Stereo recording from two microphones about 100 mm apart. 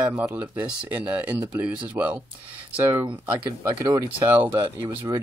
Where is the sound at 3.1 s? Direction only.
55° right (ahead or behind).